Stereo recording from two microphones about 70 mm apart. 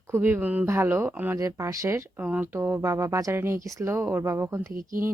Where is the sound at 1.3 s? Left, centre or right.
Right.